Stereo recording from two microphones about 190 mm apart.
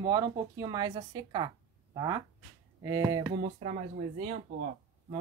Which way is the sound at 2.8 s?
15° right (ahead or behind).